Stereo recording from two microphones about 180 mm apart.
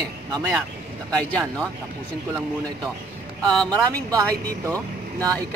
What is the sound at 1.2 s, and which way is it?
Speech, 5° left (ahead or behind).